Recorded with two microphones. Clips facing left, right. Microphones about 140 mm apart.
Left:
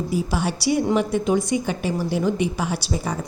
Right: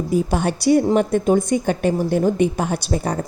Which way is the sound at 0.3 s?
50° right (ahead or behind).